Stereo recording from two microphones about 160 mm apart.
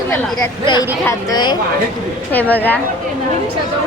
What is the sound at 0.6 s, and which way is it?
Speech, 30° left (ahead or behind).